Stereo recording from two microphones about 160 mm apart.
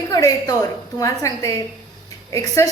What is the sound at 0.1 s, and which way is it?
A woman's voice, 20° left (ahead or behind).